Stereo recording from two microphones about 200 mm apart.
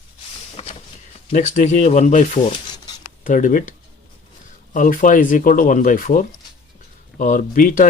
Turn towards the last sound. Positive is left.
turn(degrees=40)  # may be behind; listen again after turning